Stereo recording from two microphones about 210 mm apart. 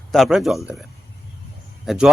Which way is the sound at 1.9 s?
5° right (ahead or behind).